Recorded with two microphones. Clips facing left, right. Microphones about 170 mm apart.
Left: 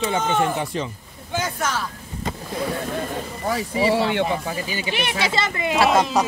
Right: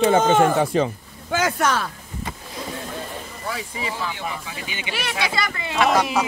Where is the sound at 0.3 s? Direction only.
90° right.